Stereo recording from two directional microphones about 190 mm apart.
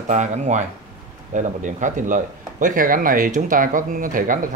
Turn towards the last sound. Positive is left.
turn(degrees=-45)  # may be behind; listen again after turning